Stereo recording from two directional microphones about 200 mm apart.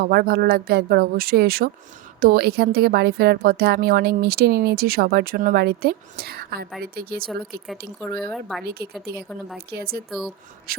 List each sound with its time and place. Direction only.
0.0 s a woman's voice: 50° right (ahead or behind)
8.2 s speech: centre (ahead or behind)
9.7 s a woman's voice: 50° right (ahead or behind)
10.1 s speech: centre (ahead or behind)
10.7 s a woman's voice: 50° right (ahead or behind)